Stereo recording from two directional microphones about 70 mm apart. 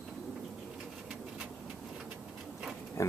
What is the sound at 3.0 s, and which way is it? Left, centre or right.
Pig, left.